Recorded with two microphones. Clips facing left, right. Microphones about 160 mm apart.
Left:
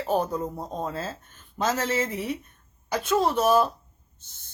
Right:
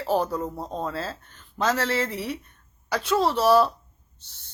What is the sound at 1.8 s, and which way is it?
Speech, 20° left (ahead or behind).